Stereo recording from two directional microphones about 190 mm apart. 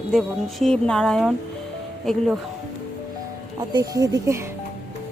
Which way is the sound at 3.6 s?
20° right (ahead or behind).